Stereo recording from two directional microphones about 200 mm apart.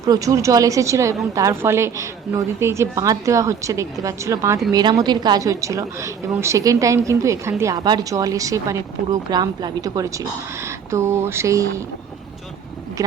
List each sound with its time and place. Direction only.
0.0 s a woman's voice: 15° right (ahead or behind)
13.0 s speech: 15° right (ahead or behind)